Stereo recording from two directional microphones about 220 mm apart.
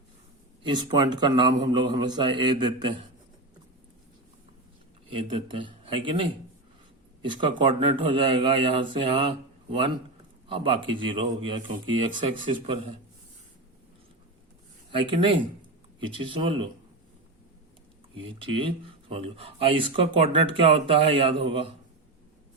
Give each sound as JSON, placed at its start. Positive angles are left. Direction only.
{"t": 0.6, "sound": "speech", "side_deg": -20}
{"t": 5.0, "sound": "speech", "side_deg": -25}
{"t": 7.2, "sound": "speech", "side_deg": -20}
{"t": 10.5, "sound": "speech", "side_deg": -25}
{"t": 12.1, "sound": "speech", "side_deg": -35}
{"t": 14.9, "sound": "speech", "side_deg": -25}
{"t": 18.2, "sound": "speech", "side_deg": -25}